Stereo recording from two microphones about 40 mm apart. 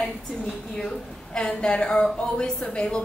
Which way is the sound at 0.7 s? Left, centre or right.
Centre.